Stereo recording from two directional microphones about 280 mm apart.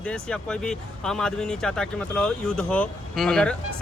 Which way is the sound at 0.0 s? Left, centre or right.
Centre.